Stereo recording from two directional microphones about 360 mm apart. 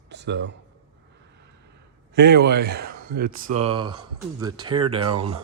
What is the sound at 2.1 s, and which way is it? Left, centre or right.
Speech, right.